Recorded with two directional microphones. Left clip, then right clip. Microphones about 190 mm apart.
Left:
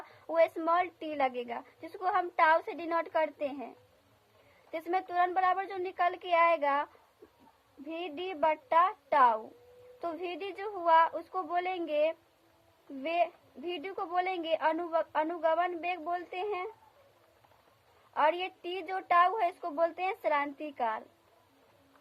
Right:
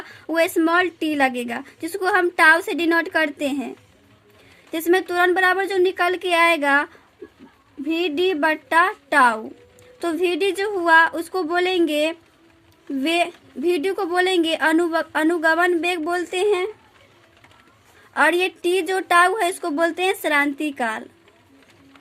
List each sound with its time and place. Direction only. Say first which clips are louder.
0.3 s a woman's voice: right 9 dB; 10° right (ahead or behind)
4.7 s a woman's voice: right 12 dB; 15° right (ahead or behind)
8.0 s a woman's voice: right 10 dB; 15° right (ahead or behind)
18.1 s a woman's voice: right 11 dB; 20° right (ahead or behind)